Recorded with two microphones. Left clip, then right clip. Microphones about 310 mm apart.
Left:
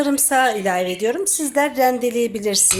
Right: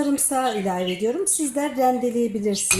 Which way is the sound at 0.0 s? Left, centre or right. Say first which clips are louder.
Left 5 dB; left.